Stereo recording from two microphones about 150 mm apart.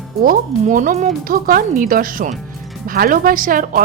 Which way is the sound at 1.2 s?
75° right (ahead or behind).